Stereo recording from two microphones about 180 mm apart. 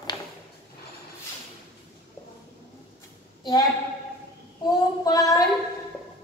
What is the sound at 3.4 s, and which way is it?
Speech, 20° left (ahead or behind).